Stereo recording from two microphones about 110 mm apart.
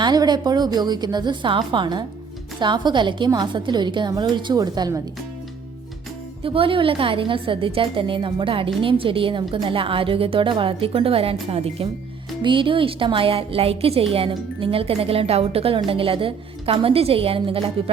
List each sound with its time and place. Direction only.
0.0 s a woman's voice: 40° right (ahead or behind)
6.4 s a woman's voice: 55° right (ahead or behind)
12.4 s a woman's voice: 50° right (ahead or behind)